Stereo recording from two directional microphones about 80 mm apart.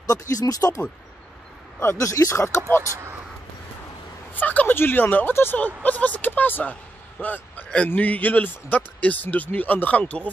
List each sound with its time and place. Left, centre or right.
0.0 s speech: left
2.0 s speech: left
4.3 s a man's voice: left